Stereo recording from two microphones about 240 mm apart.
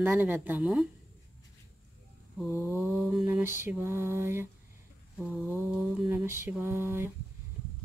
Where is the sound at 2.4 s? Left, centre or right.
Centre.